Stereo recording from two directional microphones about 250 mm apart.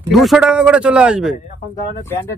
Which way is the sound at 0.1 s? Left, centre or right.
Centre.